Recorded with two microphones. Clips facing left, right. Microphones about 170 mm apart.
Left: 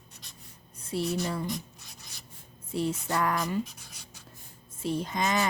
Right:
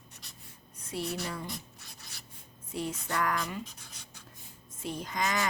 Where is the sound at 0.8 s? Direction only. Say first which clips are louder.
Left 5 dB; 30° left (ahead or behind).